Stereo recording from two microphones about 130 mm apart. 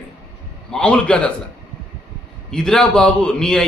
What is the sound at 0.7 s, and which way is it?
Speech, 5° left (ahead or behind).